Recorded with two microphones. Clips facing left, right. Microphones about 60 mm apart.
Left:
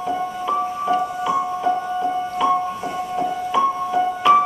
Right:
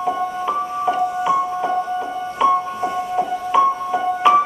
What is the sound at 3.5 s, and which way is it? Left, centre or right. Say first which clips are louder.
Music: right 4 dB; centre.